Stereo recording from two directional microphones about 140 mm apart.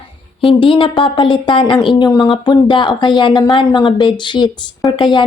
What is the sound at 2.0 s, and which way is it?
A woman's voice, 25° left (ahead or behind).